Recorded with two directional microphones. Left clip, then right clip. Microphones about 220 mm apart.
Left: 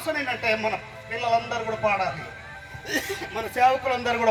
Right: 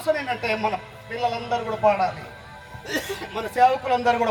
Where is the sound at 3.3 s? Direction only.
20° right (ahead or behind).